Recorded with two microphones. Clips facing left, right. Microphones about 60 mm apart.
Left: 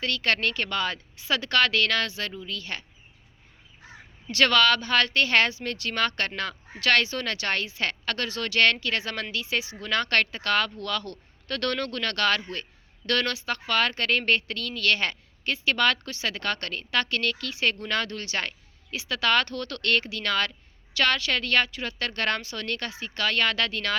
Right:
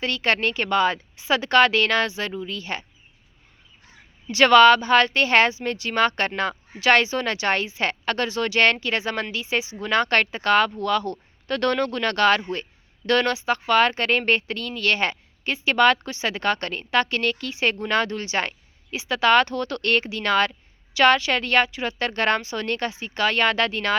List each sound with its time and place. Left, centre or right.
0.0 s speech: right
4.3 s speech: centre